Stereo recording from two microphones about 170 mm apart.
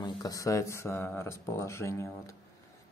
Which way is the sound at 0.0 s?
20° left (ahead or behind).